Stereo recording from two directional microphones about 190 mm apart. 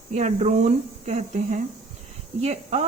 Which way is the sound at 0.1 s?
35° right (ahead or behind).